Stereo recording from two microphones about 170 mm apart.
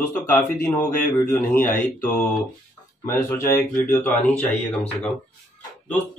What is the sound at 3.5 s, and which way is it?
Speech, 15° left (ahead or behind).